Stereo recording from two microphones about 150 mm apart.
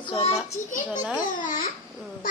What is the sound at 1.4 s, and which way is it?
Babbling, 60° left (ahead or behind).